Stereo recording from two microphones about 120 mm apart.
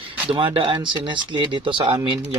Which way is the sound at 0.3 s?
50° right (ahead or behind).